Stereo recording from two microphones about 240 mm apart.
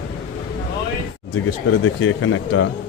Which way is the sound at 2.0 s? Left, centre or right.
Left.